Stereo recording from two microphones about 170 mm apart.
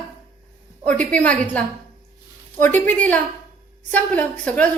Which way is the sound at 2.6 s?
10° left (ahead or behind).